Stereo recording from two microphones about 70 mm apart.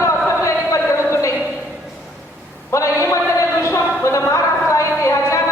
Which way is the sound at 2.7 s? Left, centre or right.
Left.